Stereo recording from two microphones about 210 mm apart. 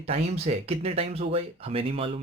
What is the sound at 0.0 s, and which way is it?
Speech, 30° right (ahead or behind).